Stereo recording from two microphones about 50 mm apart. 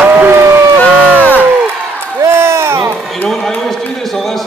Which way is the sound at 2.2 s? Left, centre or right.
Right.